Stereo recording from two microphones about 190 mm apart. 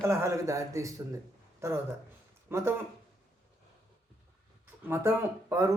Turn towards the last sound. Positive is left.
turn(degrees=-15)  # may be behind; listen again after turning